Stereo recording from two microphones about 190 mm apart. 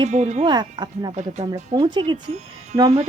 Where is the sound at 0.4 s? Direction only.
25° right (ahead or behind).